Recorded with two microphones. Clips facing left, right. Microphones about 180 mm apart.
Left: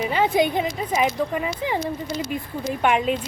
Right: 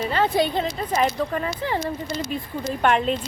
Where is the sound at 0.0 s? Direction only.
15° left (ahead or behind).